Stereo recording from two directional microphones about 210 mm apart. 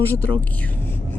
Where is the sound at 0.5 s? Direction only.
10° left (ahead or behind).